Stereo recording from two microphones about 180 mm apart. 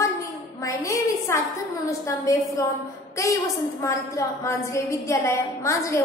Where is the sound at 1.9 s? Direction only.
15° left (ahead or behind).